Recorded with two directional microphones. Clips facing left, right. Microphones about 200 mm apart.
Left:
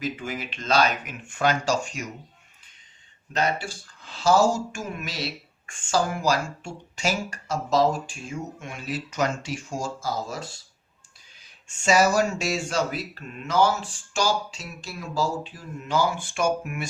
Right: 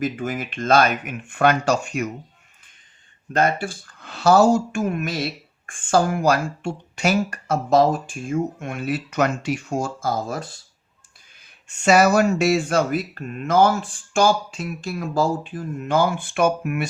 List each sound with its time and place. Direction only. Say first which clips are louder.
0.0 s speech: right 6 dB; 50° right (ahead or behind)
3.3 s speech: right 5 dB; 50° right (ahead or behind)
11.7 s speech: right 5 dB; 60° right (ahead or behind)